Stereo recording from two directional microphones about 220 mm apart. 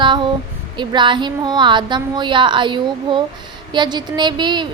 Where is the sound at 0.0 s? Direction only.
20° right (ahead or behind).